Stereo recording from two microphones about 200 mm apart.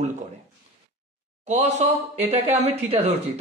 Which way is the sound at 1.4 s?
35° right (ahead or behind).